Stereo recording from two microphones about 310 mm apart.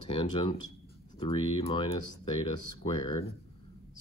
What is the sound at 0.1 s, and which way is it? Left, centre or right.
Speech, centre.